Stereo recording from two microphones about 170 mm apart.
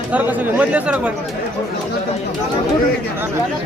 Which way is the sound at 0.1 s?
10° right (ahead or behind).